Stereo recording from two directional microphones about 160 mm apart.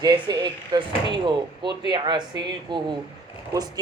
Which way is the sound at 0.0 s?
25° right (ahead or behind).